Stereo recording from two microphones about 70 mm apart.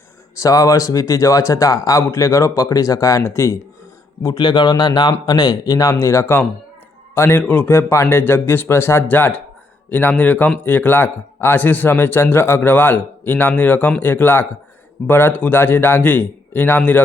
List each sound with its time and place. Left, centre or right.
0.3 s speech: left
3.2 s speech: left
4.2 s a man's voice: left
5.2 s a man's voice: left